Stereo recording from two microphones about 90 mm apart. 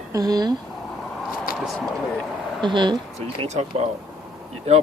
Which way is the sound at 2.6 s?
60° right (ahead or behind).